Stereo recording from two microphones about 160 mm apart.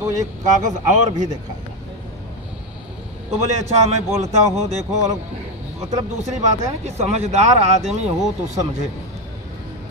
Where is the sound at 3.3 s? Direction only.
45° right (ahead or behind).